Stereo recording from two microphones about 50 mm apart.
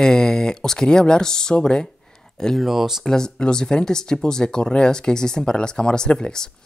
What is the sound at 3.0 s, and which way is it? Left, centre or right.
Speech, centre.